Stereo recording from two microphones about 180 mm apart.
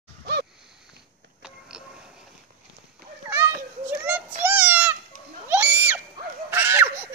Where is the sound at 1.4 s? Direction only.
5° right (ahead or behind).